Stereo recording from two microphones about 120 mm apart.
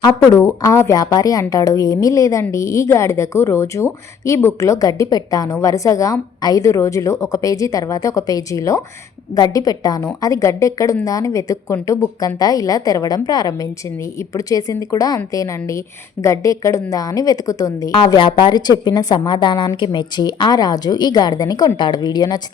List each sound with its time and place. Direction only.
0.2 s a woman's voice: 20° left (ahead or behind)
17.9 s a woman's voice: 40° left (ahead or behind)